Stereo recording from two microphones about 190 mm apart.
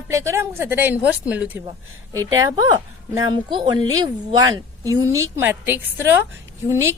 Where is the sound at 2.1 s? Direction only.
20° right (ahead or behind).